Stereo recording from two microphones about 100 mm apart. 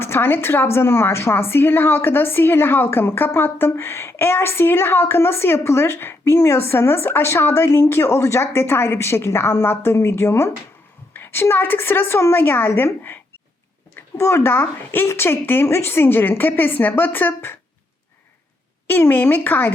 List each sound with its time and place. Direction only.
0.0 s a woman's voice: 20° left (ahead or behind)
18.9 s a woman's voice: 20° left (ahead or behind)